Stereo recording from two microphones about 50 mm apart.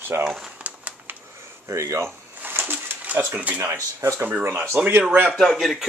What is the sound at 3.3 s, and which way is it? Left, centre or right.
Speech, right.